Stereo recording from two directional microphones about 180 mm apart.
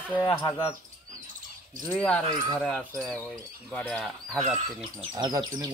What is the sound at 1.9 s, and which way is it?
Speech, 10° left (ahead or behind).